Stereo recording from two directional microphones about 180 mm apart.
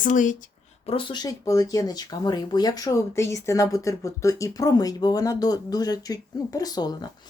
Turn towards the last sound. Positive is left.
turn(degrees=20)  # may be behind; listen again after turning